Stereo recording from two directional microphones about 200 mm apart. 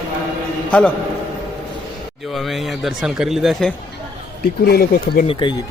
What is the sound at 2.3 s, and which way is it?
Speech, centre (ahead or behind).